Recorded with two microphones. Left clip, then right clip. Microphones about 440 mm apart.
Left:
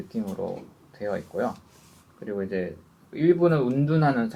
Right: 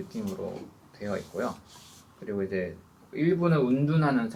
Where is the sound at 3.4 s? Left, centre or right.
Left.